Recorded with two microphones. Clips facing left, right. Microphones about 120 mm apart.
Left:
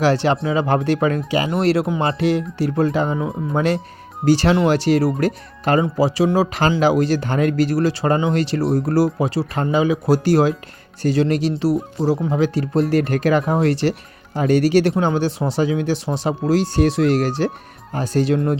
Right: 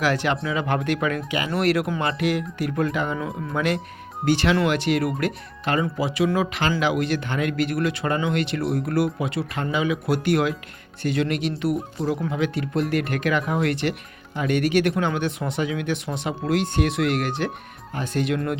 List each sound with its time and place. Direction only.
0.0 s speech: 30° left (ahead or behind)